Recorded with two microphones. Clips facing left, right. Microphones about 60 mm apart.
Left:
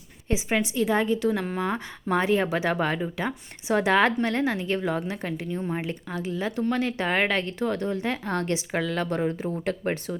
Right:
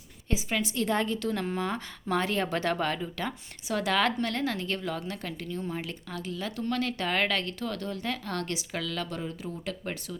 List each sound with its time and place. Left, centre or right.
0.3 s a woman's voice: left
0.8 s a woman's voice: centre; by 10.2 s left